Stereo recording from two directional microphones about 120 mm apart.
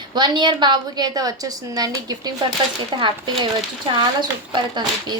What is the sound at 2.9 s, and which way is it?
Speech, 45° right (ahead or behind).